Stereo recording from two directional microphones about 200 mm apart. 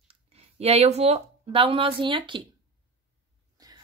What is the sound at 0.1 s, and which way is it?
Speech, 30° right (ahead or behind).